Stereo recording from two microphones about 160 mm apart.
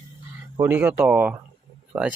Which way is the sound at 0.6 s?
10° right (ahead or behind).